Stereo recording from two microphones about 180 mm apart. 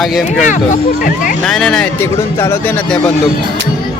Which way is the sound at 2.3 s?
15° left (ahead or behind).